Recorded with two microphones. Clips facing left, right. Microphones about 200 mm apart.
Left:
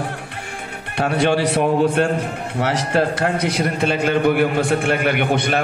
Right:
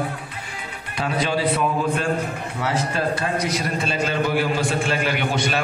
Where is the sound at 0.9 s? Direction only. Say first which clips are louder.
Left 6 dB; 65° left (ahead or behind).